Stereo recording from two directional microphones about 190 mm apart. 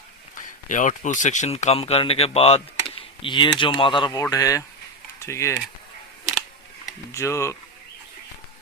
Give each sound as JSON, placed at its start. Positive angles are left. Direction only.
{"t": 0.3, "sound": "speech", "side_deg": 40}
{"t": 7.1, "sound": "speech", "side_deg": 15}